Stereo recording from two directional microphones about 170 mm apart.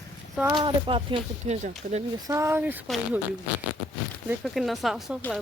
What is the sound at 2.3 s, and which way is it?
Speech, 15° right (ahead or behind).